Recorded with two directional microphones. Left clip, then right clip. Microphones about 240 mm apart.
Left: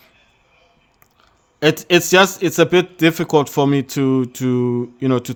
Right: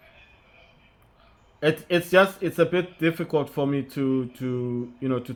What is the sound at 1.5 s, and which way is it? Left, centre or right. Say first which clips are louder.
A man's voice: left 8 dB; left.